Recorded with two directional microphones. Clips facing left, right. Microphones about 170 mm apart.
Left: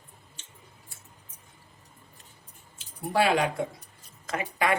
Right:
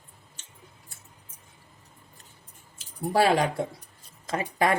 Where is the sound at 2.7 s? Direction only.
40° right (ahead or behind).